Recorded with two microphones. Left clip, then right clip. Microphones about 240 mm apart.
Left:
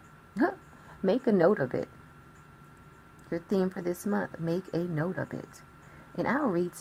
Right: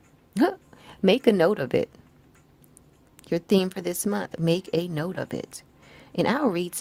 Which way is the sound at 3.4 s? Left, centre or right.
Right.